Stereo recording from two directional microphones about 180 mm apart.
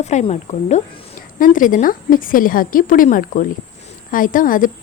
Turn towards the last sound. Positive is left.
turn(degrees=50)  # may be behind; listen again after turning